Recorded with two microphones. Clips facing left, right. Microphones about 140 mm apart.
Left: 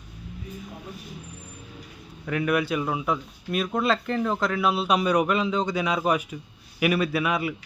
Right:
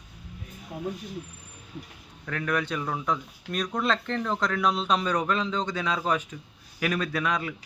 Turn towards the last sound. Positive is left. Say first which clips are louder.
# left 4 dB
turn(degrees=10)  # may be behind; listen again after turning